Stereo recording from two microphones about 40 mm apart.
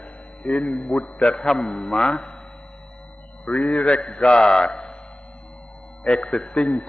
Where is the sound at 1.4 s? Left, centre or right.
Centre.